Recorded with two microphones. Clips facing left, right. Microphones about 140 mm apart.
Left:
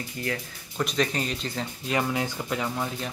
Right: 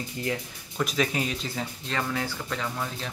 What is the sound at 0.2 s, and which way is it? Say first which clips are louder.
Speech: right 1 dB; 20° right (ahead or behind).